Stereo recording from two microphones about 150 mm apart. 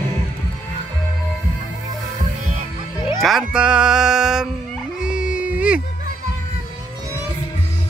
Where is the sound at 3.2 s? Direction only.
5° right (ahead or behind).